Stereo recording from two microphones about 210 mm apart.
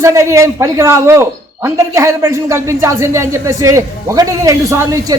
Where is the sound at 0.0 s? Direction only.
15° right (ahead or behind).